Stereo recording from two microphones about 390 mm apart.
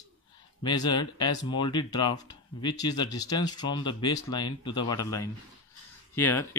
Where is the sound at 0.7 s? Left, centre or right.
Centre.